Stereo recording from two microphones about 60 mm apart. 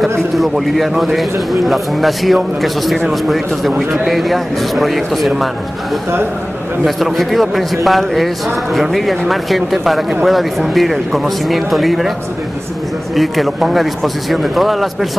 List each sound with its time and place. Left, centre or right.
0.4 s a man's voice: centre
7.0 s a man's voice: centre
13.1 s a man's voice: centre